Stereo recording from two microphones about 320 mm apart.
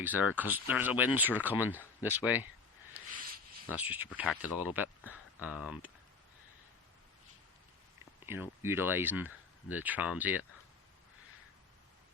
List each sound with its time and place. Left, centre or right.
0.0 s speech: centre
3.1 s a sound: right
3.7 s speech: centre
8.3 s speech: centre